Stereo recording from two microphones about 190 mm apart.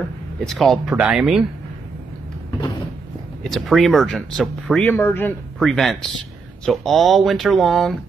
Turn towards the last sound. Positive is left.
turn(degrees=0)  # may be behind; listen again after turning